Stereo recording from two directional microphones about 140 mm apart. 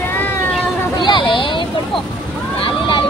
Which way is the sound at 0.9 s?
35° left (ahead or behind).